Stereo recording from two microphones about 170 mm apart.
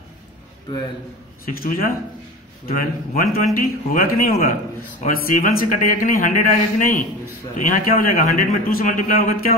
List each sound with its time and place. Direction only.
1.4 s a man's voice: 60° left (ahead or behind)